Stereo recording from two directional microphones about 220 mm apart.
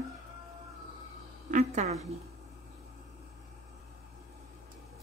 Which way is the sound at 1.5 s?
30° right (ahead or behind).